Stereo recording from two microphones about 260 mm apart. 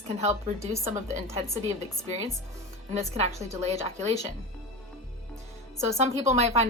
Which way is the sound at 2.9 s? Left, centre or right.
Right.